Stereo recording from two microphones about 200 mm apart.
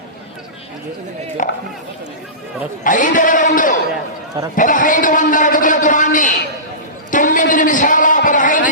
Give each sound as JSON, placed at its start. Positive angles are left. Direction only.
{"t": 1.4, "sound": "chop", "side_deg": 45}
{"t": 2.8, "sound": "a man's voice", "side_deg": 40}